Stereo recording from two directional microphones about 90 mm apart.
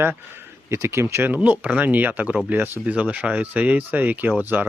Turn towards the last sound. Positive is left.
turn(degrees=-20)  # may be behind; listen again after turning